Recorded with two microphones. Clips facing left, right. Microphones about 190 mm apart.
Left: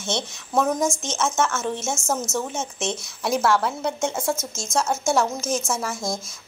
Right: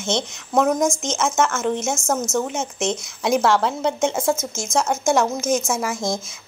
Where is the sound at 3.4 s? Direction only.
90° right.